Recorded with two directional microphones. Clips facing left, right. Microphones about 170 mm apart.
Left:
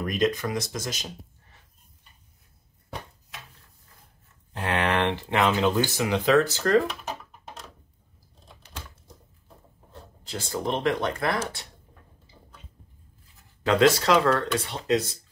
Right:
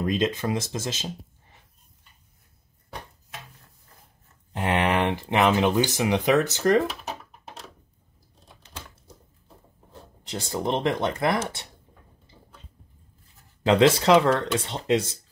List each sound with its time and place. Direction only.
0.0 s speech: 25° right (ahead or behind)
4.5 s speech: 15° right (ahead or behind)
10.3 s speech: 25° right (ahead or behind)
13.7 s speech: 20° right (ahead or behind)